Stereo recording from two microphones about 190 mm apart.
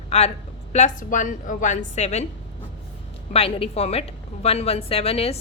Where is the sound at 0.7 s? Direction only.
40° left (ahead or behind).